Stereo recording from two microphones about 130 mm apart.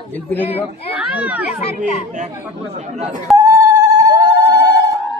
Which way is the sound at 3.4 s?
25° right (ahead or behind).